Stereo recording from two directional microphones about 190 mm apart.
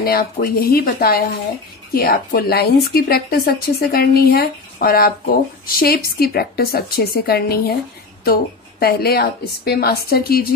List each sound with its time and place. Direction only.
0.0 s a woman's voice: 55° left (ahead or behind)